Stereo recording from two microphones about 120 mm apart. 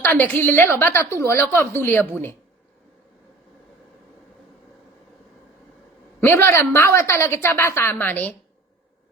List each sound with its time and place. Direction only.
0.0 s a woman's voice: 15° left (ahead or behind)
6.1 s a woman's voice: 20° left (ahead or behind)